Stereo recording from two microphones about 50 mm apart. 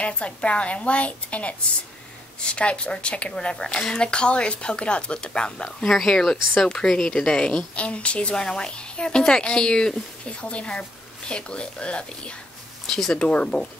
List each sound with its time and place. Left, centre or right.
0.0 s a woman's voice: left
12.8 s speech: centre
13.2 s speech: left